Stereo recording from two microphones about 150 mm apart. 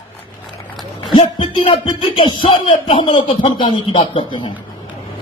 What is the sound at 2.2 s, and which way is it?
Speech, 35° left (ahead or behind).